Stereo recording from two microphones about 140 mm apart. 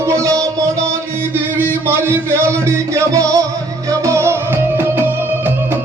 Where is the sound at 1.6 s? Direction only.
15° right (ahead or behind).